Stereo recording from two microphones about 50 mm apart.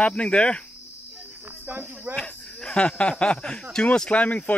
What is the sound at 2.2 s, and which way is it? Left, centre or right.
Snake, centre.